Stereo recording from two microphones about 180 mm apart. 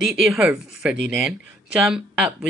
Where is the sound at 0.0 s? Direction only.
Centre (ahead or behind).